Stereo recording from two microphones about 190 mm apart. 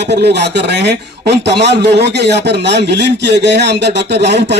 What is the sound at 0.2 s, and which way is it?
A man's voice, 60° right (ahead or behind).